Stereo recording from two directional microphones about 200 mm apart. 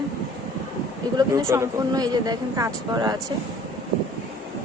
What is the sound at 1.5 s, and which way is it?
Speech, 15° right (ahead or behind).